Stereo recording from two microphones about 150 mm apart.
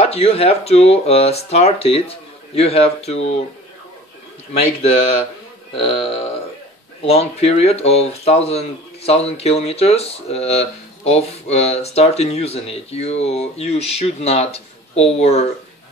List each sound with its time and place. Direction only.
0.0 s speech: 45° left (ahead or behind)
5.8 s speech: 40° left (ahead or behind)